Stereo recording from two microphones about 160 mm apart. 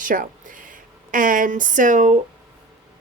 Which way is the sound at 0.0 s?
55° right (ahead or behind).